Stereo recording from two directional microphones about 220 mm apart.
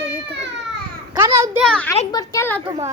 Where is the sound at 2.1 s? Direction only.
15° left (ahead or behind).